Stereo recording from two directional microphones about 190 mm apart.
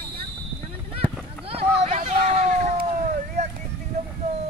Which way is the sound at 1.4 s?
35° right (ahead or behind).